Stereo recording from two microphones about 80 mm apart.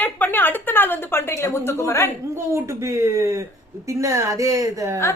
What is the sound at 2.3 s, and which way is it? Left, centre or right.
A woman's voice, right.